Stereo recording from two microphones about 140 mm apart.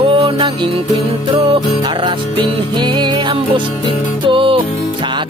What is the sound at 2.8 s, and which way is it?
Music, 30° right (ahead or behind).